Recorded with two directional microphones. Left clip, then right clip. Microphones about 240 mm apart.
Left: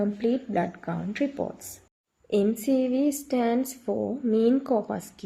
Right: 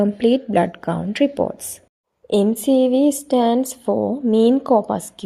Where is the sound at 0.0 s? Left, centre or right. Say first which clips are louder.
Right 9 dB; right.